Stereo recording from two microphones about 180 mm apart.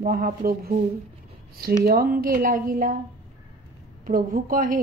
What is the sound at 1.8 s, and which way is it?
A woman's voice, 55° right (ahead or behind).